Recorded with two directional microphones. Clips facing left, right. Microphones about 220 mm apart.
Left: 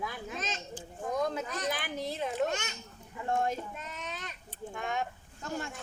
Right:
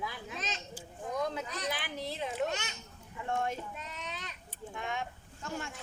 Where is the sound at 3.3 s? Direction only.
40° left (ahead or behind).